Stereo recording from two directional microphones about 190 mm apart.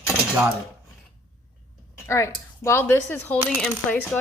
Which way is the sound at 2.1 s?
15° left (ahead or behind).